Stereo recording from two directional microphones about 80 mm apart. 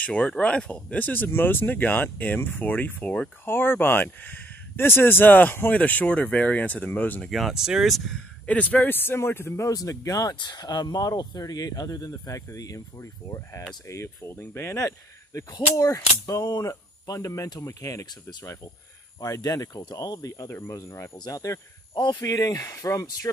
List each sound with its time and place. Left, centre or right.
0.0 s speech: centre
7.2 s speech: centre
8.5 s speech: centre
9.7 s speech: left
10.3 s speech: left
14.8 s speech: left
19.1 s speech: left
20.2 s speech: left
21.9 s speech: left
22.2 s speech: left